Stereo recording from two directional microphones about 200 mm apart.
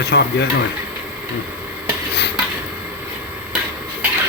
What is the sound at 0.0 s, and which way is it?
Speech, 60° left (ahead or behind).